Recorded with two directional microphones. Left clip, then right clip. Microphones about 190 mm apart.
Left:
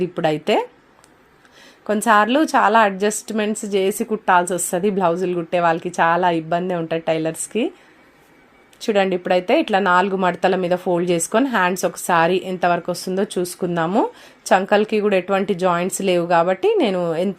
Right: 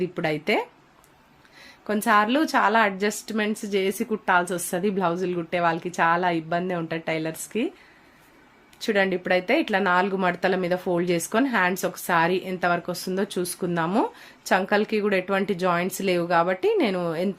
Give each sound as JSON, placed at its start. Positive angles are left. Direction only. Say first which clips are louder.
{"t": 0.0, "sound": "a woman's voice", "louder": "left 6 dB", "side_deg": 25}
{"t": 1.9, "sound": "a woman's voice", "louder": "left 5 dB", "side_deg": 25}
{"t": 8.8, "sound": "a woman's voice", "louder": "left 5 dB", "side_deg": 20}